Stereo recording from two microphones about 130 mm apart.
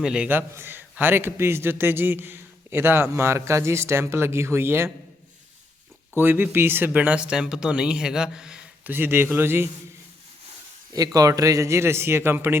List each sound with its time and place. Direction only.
0.0 s a man's voice: 5° right (ahead or behind)
6.1 s a man's voice: 15° right (ahead or behind)
10.9 s a man's voice: 30° right (ahead or behind)